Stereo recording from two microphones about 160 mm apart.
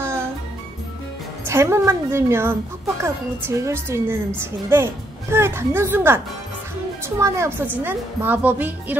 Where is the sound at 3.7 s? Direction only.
15° right (ahead or behind).